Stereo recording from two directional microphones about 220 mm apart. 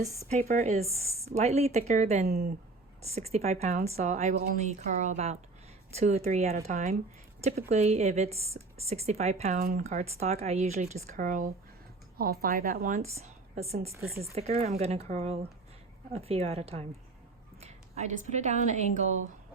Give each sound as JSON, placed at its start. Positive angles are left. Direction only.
{"t": 0.3, "sound": "a woman's voice", "side_deg": -35}
{"t": 2.2, "sound": "speech", "side_deg": -45}
{"t": 3.0, "sound": "a woman's voice", "side_deg": -30}